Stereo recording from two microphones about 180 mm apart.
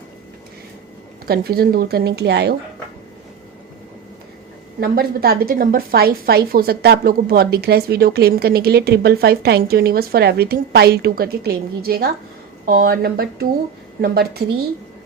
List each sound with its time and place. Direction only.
1.3 s a woman's voice: 55° right (ahead or behind)
4.8 s a woman's voice: 55° right (ahead or behind)